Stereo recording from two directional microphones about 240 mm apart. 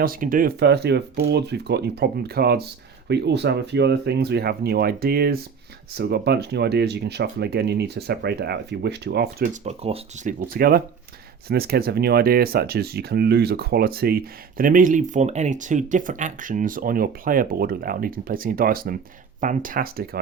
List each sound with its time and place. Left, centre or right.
0.0 s speech: right